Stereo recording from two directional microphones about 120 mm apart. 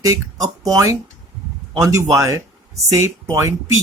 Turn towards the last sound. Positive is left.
turn(degrees=-25)  # may be behind; listen again after turning